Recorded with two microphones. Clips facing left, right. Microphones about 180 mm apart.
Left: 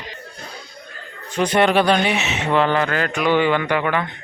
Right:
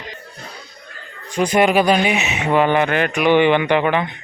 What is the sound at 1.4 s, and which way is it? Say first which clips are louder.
Speech: right 1 dB; 10° right (ahead or behind).